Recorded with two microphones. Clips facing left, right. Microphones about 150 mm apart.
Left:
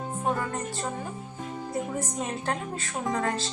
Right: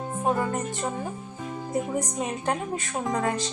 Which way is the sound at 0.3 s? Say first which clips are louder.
Right 4 dB; 20° right (ahead or behind).